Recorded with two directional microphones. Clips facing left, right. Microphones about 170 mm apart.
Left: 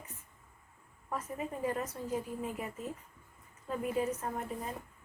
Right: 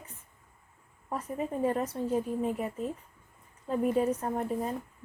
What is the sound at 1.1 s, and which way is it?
A woman's voice, 30° right (ahead or behind).